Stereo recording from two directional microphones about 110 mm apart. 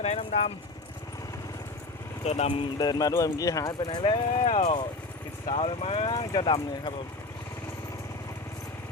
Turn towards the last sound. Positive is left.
turn(degrees=50)  # may be behind; listen again after turning